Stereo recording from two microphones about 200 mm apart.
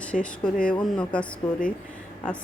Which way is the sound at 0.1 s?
5° left (ahead or behind).